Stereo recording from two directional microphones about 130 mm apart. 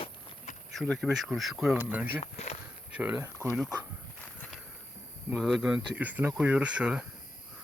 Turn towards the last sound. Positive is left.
turn(degrees=-10)  # may be behind; listen again after turning